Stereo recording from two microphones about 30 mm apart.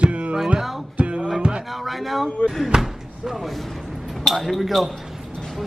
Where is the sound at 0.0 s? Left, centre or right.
Right.